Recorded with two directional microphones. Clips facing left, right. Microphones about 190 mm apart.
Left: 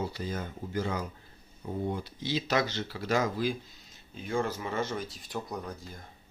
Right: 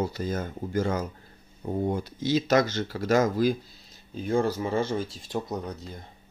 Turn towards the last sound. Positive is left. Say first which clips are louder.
# right 5 dB
turn(degrees=-20)  # may be behind; listen again after turning